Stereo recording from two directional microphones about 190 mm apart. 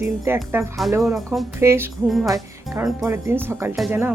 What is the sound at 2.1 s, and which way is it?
Speech, centre (ahead or behind).